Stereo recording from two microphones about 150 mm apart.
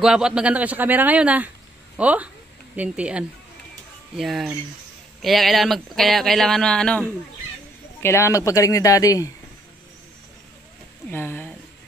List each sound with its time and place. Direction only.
0.0 s a man's voice: 5° right (ahead or behind)
8.0 s speech: 20° left (ahead or behind)
11.1 s speech: 15° left (ahead or behind)